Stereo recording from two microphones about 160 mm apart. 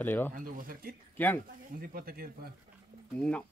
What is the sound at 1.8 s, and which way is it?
Speech, 65° right (ahead or behind).